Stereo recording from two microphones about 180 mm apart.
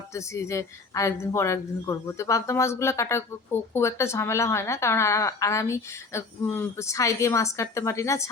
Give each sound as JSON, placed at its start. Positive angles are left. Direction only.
{"t": 0.1, "sound": "speech", "side_deg": 15}